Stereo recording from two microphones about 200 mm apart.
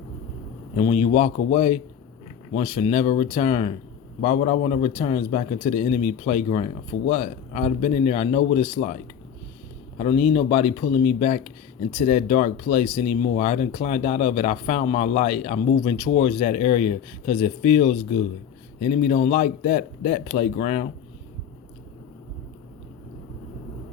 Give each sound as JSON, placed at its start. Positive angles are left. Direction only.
{"t": 0.8, "sound": "speech", "side_deg": 30}
{"t": 10.0, "sound": "speech", "side_deg": 30}